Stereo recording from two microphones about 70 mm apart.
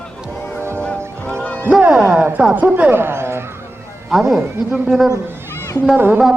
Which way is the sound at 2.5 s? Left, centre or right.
Right.